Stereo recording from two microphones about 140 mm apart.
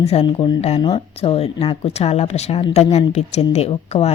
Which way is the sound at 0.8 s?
35° left (ahead or behind).